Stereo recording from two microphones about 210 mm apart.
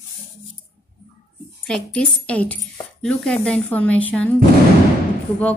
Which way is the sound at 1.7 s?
5° left (ahead or behind).